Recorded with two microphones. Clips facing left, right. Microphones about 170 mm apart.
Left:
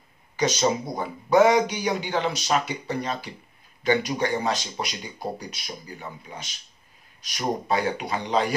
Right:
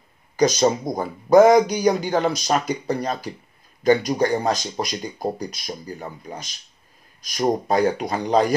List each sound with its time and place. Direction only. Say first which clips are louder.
0.4 s speech: right 5 dB; 40° right (ahead or behind)